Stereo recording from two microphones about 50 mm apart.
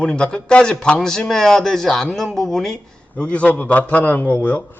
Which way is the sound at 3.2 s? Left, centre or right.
Left.